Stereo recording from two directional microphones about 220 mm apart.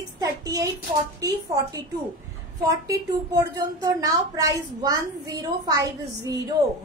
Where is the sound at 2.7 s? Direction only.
15° right (ahead or behind).